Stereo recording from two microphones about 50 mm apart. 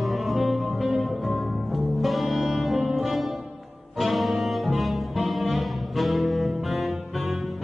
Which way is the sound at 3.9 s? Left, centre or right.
Centre.